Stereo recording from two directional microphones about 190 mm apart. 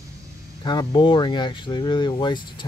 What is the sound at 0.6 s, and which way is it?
Speech, 25° left (ahead or behind).